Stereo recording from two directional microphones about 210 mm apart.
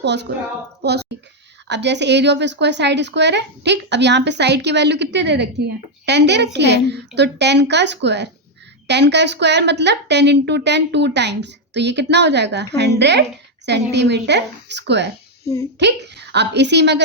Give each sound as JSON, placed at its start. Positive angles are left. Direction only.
{"t": 0.0, "sound": "a woman's voice", "side_deg": -55}